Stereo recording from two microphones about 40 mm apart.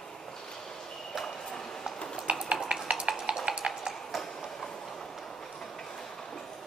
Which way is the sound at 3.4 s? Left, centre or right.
Right.